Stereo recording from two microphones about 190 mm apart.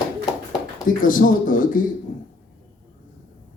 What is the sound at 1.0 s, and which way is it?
Speech, 45° left (ahead or behind).